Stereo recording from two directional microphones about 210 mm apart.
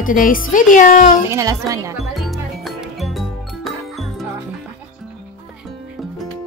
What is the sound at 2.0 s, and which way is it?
Music, centre (ahead or behind).